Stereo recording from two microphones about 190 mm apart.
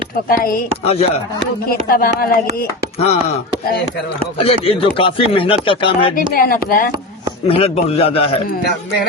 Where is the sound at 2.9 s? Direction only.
30° left (ahead or behind).